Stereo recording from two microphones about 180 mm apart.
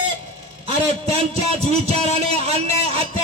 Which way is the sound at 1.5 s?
35° right (ahead or behind).